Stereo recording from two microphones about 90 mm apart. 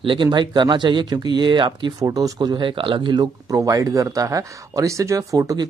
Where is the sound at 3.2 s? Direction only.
40° right (ahead or behind).